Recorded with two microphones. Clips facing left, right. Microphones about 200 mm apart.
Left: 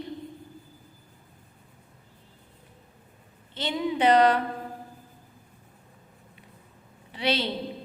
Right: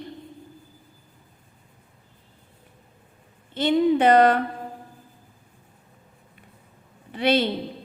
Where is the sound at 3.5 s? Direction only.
50° right (ahead or behind).